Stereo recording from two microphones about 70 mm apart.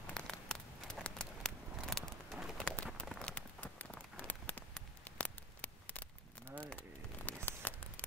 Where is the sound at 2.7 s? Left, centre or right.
Centre.